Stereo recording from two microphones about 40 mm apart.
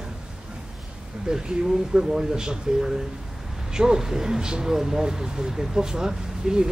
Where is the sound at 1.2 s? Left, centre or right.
Centre.